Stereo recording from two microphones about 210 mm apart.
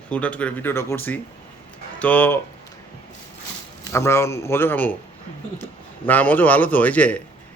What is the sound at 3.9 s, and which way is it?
Speech, 15° left (ahead or behind).